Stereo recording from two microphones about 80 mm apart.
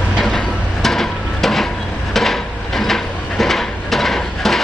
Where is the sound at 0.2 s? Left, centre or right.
Centre.